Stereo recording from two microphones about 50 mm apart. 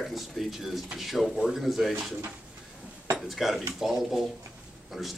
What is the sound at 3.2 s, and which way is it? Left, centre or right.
Speech, centre.